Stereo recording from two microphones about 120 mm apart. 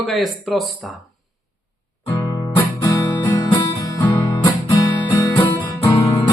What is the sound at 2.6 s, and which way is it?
Music, 30° left (ahead or behind).